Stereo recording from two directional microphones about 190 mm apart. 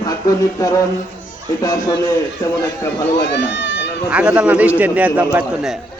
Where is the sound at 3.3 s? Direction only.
65° left (ahead or behind).